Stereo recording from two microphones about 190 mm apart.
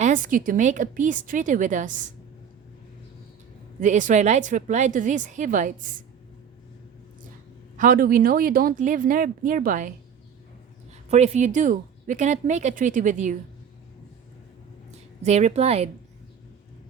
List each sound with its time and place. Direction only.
0.0 s a woman's voice: 40° right (ahead or behind)
3.8 s speech: 40° right (ahead or behind)
7.8 s a woman's voice: 45° right (ahead or behind)
11.1 s speech: 35° right (ahead or behind)
15.2 s speech: 35° right (ahead or behind)